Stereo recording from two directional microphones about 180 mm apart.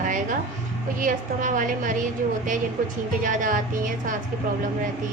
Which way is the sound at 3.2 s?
45° right (ahead or behind).